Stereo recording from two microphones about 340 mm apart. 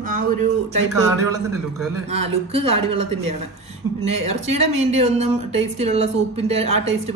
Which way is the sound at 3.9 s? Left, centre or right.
Right.